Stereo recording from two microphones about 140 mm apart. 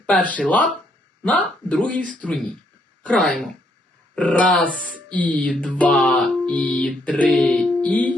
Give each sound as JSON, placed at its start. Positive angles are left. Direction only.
{"t": 0.3, "sound": "music", "side_deg": 10}
{"t": 4.8, "sound": "speech", "side_deg": -70}
{"t": 5.1, "sound": "music", "side_deg": 10}